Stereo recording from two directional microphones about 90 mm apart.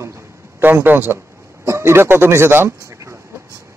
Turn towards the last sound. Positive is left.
turn(degrees=-30)  # may be behind; listen again after turning